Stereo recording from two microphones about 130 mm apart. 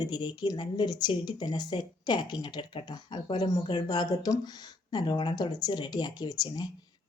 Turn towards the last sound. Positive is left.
turn(degrees=30)  # may be behind; listen again after turning